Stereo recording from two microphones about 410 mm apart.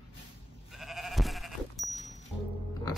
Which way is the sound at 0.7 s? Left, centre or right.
Centre.